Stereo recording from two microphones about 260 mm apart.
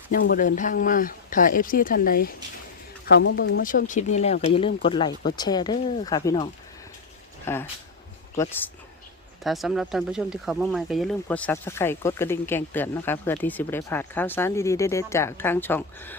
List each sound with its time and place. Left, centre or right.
0.2 s speech: left; by 16.1 s centre